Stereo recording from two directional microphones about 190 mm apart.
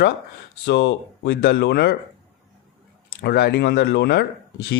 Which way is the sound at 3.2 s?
55° left (ahead or behind).